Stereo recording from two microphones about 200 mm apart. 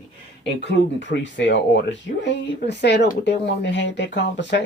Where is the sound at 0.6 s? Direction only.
60° left (ahead or behind).